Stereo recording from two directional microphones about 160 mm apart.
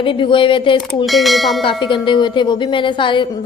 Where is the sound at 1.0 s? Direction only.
Centre (ahead or behind).